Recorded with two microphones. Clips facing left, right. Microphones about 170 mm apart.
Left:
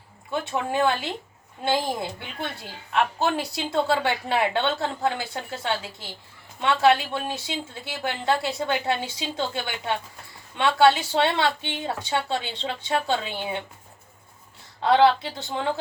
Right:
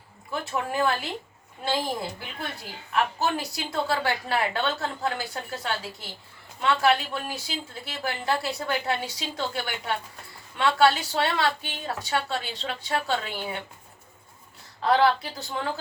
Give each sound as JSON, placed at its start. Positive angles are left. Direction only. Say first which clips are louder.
{"t": 0.3, "sound": "speech", "louder": "left 3 dB", "side_deg": 25}
{"t": 10.6, "sound": "speech", "louder": "left 2 dB", "side_deg": 25}
{"t": 14.8, "sound": "speech", "louder": "left 3 dB", "side_deg": 25}